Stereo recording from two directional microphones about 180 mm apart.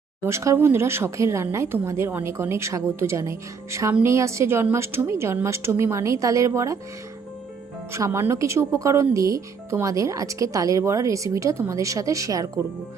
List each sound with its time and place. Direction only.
0.3 s speech: 15° right (ahead or behind)
7.9 s speech: 15° right (ahead or behind)